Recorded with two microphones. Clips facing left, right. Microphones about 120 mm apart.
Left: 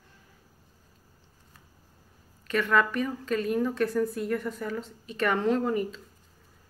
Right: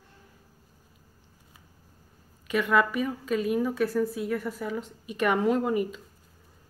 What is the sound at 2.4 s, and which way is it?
A woman's voice, 10° right (ahead or behind).